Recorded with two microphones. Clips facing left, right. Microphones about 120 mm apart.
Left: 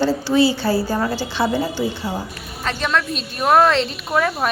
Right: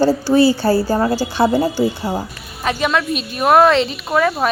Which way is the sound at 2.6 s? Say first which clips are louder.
Right 3 dB; 10° right (ahead or behind).